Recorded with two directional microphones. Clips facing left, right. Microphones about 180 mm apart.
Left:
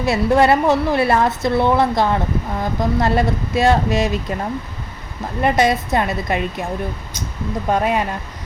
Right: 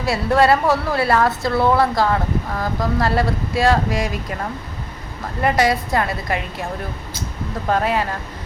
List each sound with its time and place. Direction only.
0.0 s a woman's voice: 20° left (ahead or behind)
5.4 s a woman's voice: 20° left (ahead or behind)
7.7 s a woman's voice: 20° left (ahead or behind)